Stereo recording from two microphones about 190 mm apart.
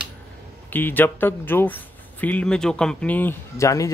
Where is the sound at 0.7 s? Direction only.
10° left (ahead or behind).